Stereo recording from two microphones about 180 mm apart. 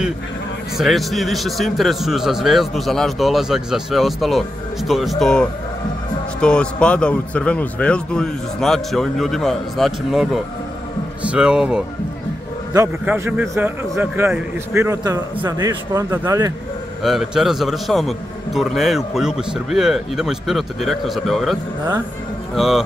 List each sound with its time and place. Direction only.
0.7 s a man's voice: centre (ahead or behind); by 16.5 s 20° right (ahead or behind)
17.0 s a man's voice: centre (ahead or behind)